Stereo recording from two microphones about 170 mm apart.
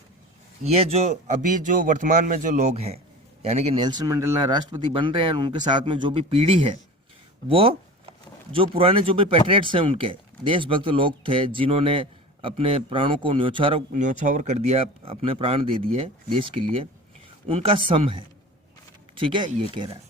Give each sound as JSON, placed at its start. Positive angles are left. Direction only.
{"t": 0.6, "sound": "a man's voice", "side_deg": -40}
{"t": 3.8, "sound": "speech", "side_deg": -25}
{"t": 7.4, "sound": "a sound", "side_deg": -30}
{"t": 8.5, "sound": "speech", "side_deg": -35}
{"t": 13.9, "sound": "speech", "side_deg": -50}